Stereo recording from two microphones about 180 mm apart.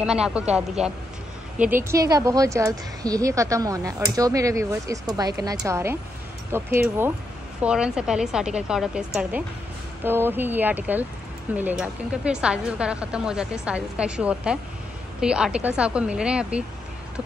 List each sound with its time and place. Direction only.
0.0 s a woman's voice: 5° right (ahead or behind)